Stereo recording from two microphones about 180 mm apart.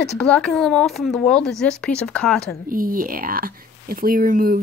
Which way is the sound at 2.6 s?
50° right (ahead or behind).